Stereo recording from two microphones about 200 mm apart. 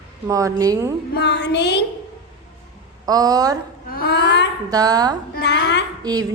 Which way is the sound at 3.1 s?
20° right (ahead or behind).